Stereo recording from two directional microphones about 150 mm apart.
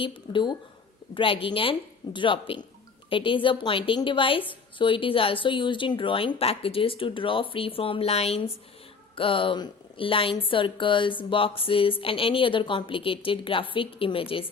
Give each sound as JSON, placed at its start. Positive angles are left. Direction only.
{"t": 0.0, "sound": "a woman's voice", "side_deg": 35}